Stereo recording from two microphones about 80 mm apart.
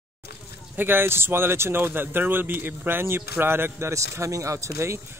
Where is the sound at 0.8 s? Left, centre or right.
Right.